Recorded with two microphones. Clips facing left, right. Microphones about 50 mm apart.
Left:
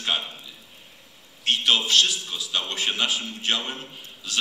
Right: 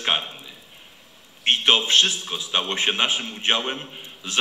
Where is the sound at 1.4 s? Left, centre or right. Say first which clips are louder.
Right 3 dB; right.